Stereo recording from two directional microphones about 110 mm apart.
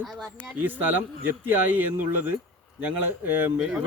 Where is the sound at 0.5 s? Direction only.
15° right (ahead or behind).